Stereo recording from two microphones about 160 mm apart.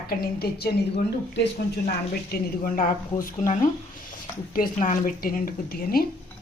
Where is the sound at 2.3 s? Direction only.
60° left (ahead or behind).